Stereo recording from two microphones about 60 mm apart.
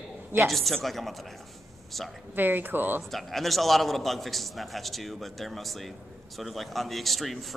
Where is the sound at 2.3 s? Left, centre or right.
Right.